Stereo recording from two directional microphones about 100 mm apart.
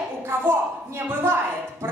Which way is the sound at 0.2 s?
25° right (ahead or behind).